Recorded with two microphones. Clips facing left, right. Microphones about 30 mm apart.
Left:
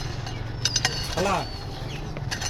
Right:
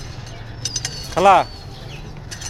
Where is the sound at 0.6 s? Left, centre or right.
Left.